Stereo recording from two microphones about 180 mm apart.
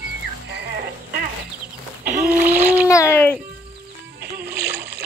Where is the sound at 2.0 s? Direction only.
55° right (ahead or behind).